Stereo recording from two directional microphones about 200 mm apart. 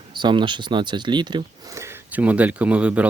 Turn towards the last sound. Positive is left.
turn(degrees=-5)  # may be behind; listen again after turning